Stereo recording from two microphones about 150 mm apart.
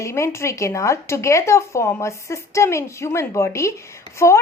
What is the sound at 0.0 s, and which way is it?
Speech, 20° left (ahead or behind).